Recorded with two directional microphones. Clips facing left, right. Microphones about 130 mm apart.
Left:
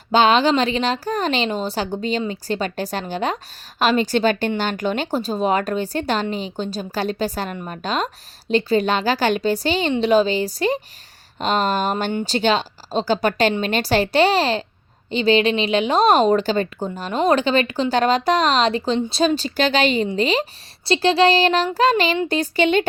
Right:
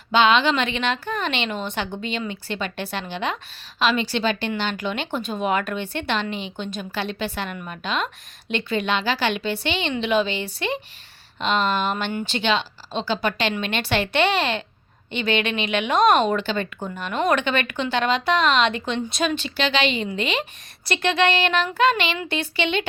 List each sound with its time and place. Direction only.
0.1 s a woman's voice: 40° left (ahead or behind)